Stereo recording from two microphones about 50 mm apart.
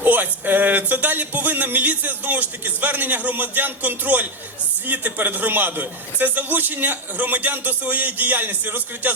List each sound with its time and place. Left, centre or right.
0.0 s speech: right